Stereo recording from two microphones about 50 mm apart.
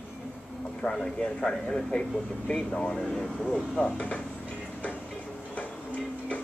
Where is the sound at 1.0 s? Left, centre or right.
Centre.